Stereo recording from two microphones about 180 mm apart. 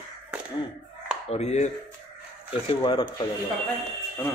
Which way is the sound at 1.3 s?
35° left (ahead or behind).